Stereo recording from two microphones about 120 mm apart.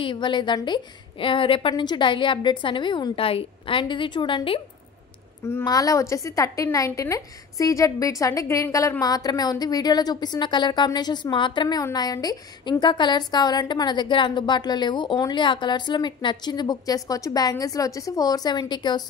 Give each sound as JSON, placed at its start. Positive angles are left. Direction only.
{"t": 0.0, "sound": "a woman's voice", "side_deg": 40}
{"t": 5.4, "sound": "a woman's voice", "side_deg": 25}